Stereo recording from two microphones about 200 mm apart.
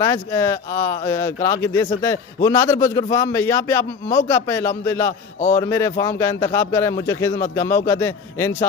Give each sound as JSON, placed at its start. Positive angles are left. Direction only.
{"t": 0.0, "sound": "a man's voice", "side_deg": 15}